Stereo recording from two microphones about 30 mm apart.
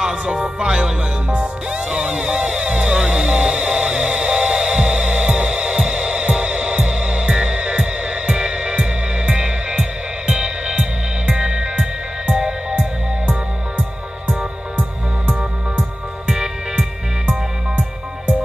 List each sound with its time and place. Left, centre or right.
0.0 s music: right
13.3 s music: right